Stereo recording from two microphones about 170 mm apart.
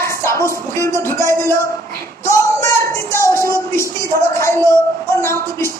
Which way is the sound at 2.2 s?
20° left (ahead or behind).